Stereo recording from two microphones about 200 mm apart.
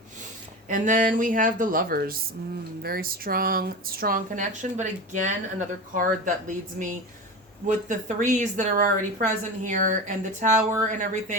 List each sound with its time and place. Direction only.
0.7 s a woman's voice: 40° right (ahead or behind)